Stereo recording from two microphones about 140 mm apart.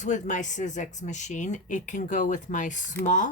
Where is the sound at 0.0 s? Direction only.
60° left (ahead or behind).